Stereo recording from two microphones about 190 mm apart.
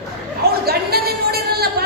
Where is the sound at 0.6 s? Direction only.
55° right (ahead or behind).